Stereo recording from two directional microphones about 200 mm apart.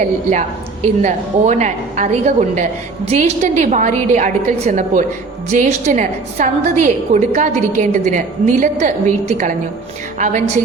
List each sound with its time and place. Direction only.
0.3 s a woman's voice: 35° right (ahead or behind)